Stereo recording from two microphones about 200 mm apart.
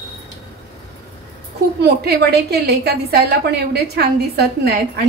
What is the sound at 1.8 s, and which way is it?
A woman's voice, 55° right (ahead or behind).